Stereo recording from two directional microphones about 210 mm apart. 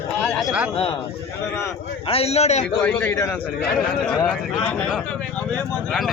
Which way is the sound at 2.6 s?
5° left (ahead or behind).